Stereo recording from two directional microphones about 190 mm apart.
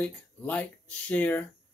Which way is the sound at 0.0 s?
5° left (ahead or behind).